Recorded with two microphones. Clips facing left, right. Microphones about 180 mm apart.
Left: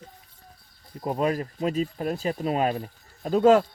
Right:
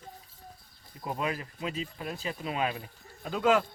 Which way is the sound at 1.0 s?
40° left (ahead or behind).